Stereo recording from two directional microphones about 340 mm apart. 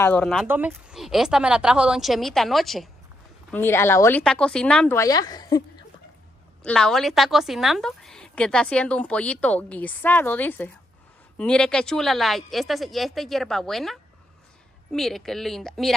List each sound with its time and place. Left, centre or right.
0.0 s a woman's voice: centre